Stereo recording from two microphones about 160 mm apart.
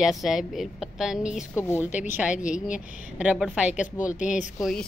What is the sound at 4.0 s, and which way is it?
Speech, 55° left (ahead or behind).